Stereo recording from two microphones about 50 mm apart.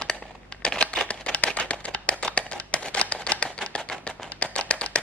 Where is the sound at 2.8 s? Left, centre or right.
Left.